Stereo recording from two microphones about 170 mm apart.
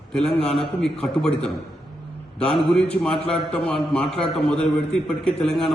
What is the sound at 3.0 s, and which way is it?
A man's voice, 5° left (ahead or behind).